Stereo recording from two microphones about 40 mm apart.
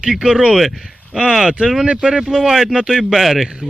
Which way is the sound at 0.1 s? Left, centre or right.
Centre.